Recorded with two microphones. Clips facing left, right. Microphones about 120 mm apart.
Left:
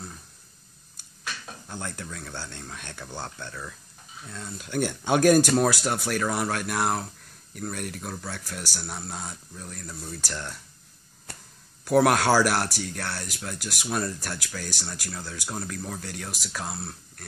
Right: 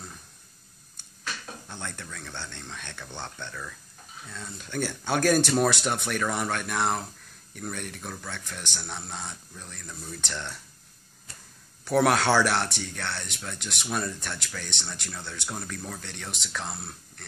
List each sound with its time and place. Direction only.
1.7 s speech: 10° left (ahead or behind)
11.3 s a sound: 70° left (ahead or behind)
11.8 s speech: 10° left (ahead or behind)